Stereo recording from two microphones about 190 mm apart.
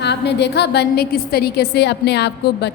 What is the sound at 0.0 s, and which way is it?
A woman's voice, 65° left (ahead or behind).